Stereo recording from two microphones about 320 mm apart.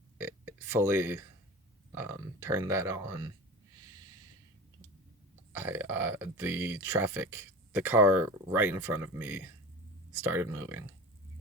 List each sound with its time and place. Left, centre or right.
0.2 s a sound: centre
2.0 s speech: centre
5.5 s speech: centre